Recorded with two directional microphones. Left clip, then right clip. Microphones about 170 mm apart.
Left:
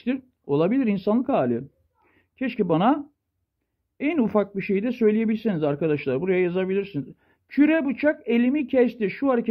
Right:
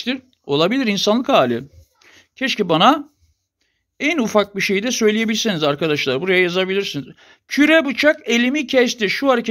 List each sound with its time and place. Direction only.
0.0 s speech: 15° right (ahead or behind)
4.0 s speech: 15° right (ahead or behind)